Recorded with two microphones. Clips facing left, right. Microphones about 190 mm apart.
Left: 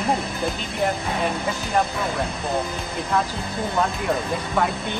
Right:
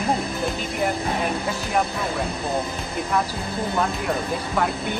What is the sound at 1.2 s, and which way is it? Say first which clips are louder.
Speech: even; centre (ahead or behind).